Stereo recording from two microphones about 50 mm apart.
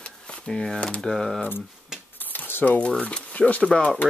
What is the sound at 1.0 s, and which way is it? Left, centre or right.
Speech, centre.